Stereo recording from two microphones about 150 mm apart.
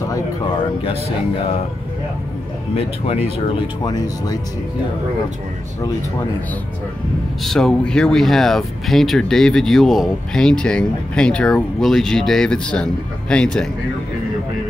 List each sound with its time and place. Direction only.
2.7 s speech: 40° left (ahead or behind)
3.8 s speech: 25° left (ahead or behind)
7.4 s speech: 5° left (ahead or behind)